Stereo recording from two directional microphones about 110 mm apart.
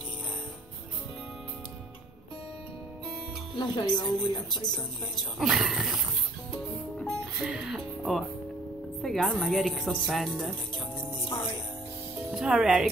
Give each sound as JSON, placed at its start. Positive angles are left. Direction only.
{"t": 3.5, "sound": "a woman's voice", "side_deg": 40}
{"t": 5.4, "sound": "speech", "side_deg": -5}
{"t": 7.4, "sound": "speech", "side_deg": -5}
{"t": 12.3, "sound": "speech", "side_deg": -5}